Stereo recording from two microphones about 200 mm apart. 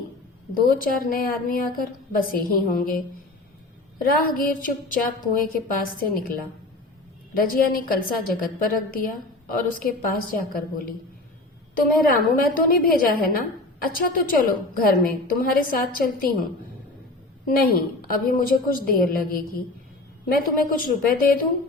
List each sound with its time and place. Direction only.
0.5 s a woman's voice: 45° left (ahead or behind)
12.0 s a woman's voice: 45° left (ahead or behind)
17.5 s a woman's voice: 45° left (ahead or behind)